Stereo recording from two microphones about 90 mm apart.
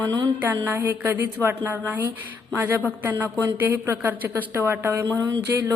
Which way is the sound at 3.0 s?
20° right (ahead or behind).